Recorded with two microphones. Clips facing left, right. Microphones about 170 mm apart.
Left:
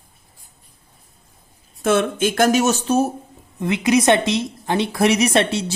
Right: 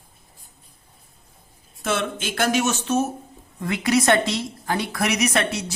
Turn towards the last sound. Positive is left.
turn(degrees=30)  # may be behind; listen again after turning